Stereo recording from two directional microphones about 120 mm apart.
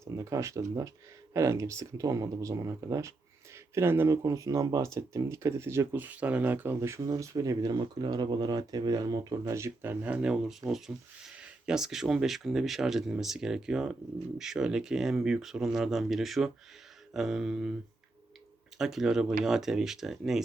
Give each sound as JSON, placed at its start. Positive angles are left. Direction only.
{"t": 0.0, "sound": "speech", "side_deg": -25}
{"t": 18.8, "sound": "speech", "side_deg": -5}